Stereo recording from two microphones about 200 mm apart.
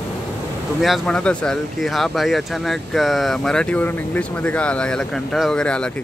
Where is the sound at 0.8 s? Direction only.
Centre (ahead or behind).